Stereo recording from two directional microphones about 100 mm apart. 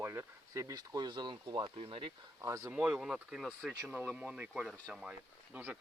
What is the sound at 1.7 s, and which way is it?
Speech, 65° right (ahead or behind).